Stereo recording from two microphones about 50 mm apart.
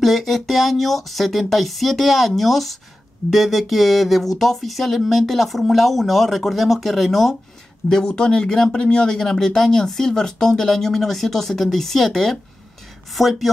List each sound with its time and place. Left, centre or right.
0.0 s speech: centre
7.8 s speech: centre